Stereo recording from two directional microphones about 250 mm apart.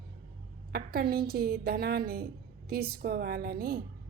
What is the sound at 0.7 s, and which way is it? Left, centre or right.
A woman's voice, right.